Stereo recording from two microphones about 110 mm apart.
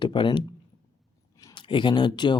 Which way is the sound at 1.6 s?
45° left (ahead or behind).